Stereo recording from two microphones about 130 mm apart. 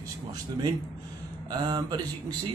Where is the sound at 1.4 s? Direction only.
35° right (ahead or behind).